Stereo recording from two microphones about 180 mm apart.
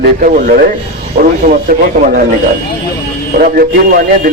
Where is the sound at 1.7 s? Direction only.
55° right (ahead or behind).